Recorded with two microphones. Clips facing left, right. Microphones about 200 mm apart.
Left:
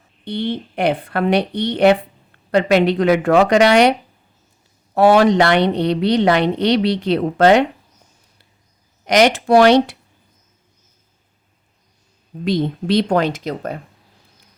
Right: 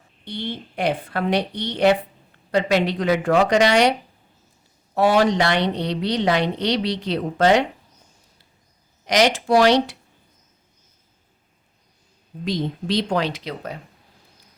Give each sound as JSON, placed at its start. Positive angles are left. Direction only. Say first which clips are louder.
{"t": 0.3, "sound": "speech", "louder": "left 7 dB", "side_deg": 60}
{"t": 4.9, "sound": "speech", "louder": "left 5 dB", "side_deg": 60}
{"t": 9.0, "sound": "speech", "louder": "left 5 dB", "side_deg": 60}
{"t": 12.5, "sound": "speech", "louder": "left 6 dB", "side_deg": 60}